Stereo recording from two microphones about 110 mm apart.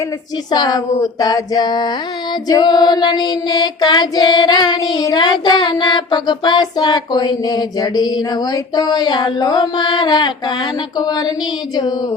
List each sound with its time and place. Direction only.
0.5 s child singing: 35° left (ahead or behind)